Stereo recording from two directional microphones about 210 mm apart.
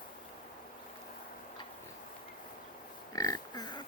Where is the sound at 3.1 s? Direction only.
15° left (ahead or behind).